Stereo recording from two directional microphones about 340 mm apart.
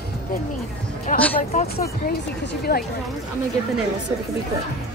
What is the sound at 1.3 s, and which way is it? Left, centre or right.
Speech, centre.